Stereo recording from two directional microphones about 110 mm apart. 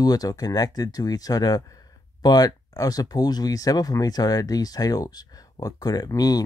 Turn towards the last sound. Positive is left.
turn(degrees=35)  # may be behind; listen again after turning